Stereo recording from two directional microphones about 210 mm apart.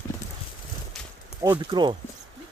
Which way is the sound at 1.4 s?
20° right (ahead or behind).